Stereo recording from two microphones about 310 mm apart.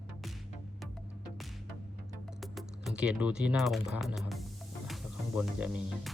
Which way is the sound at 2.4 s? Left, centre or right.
Centre.